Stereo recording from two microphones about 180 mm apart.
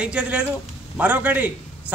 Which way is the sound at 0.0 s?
5° right (ahead or behind).